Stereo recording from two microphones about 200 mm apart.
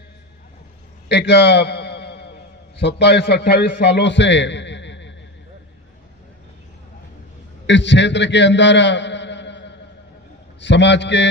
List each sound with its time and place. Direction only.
1.0 s a sound: 60° left (ahead or behind)
2.7 s a man's voice: 60° left (ahead or behind)
7.7 s a man's voice: 65° left (ahead or behind)